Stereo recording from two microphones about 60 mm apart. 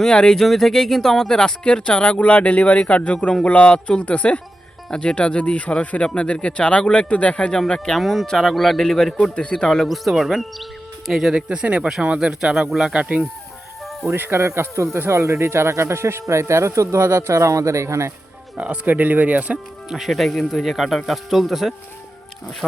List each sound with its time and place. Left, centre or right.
0.0 s a man's voice: centre
7.9 s speech: centre
9.6 s speech: centre
11.3 s speech: centre
12.9 s speech: right
14.0 s speech: right
18.5 s speech: right
19.9 s speech: centre